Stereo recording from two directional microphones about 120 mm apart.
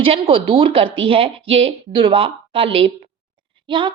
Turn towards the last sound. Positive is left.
turn(degrees=-40)  # may be behind; listen again after turning